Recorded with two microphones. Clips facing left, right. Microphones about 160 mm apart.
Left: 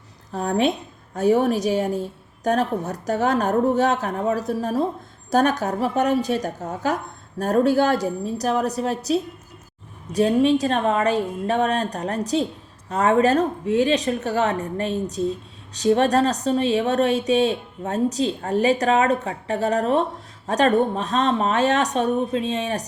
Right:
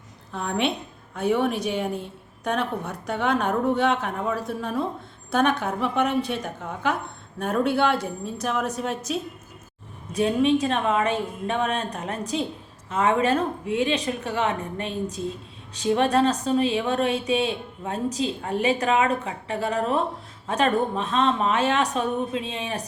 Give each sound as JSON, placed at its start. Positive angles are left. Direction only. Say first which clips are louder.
{"t": 0.3, "sound": "speech", "louder": "left 5 dB", "side_deg": 40}